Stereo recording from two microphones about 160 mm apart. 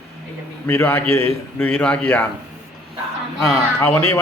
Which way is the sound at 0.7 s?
15° left (ahead or behind).